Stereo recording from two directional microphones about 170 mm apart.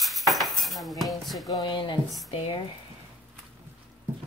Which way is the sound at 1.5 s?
25° left (ahead or behind).